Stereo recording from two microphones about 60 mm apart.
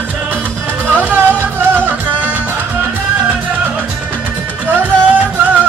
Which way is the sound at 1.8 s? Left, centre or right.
Right.